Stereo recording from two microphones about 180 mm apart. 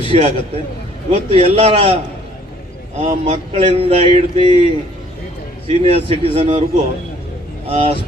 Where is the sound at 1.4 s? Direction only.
35° right (ahead or behind).